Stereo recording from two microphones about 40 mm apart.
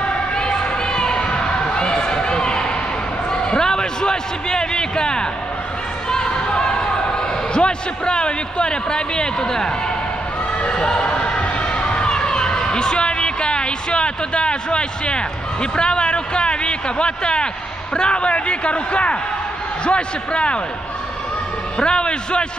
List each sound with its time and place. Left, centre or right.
0.0 s a sound: left
17.9 s a man's voice: left
21.7 s a man's voice: left